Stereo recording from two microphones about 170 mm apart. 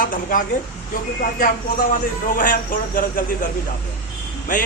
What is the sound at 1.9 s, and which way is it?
A man's voice, 50° left (ahead or behind).